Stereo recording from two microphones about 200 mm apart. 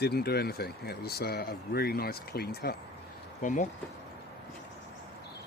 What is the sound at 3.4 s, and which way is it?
Speech, 40° left (ahead or behind).